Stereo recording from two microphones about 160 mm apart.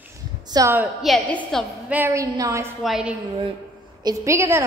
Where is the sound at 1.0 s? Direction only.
5° left (ahead or behind).